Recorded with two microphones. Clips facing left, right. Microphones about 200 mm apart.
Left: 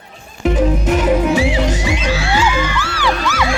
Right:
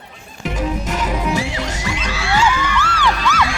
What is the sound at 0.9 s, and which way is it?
Music, 55° left (ahead or behind).